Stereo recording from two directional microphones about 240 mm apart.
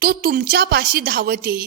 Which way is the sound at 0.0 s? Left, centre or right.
Right.